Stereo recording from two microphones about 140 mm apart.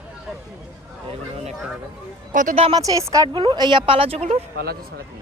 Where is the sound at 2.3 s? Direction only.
65° right (ahead or behind).